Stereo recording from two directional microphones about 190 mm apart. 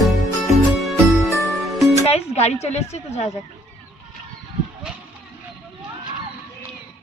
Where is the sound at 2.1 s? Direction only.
35° left (ahead or behind).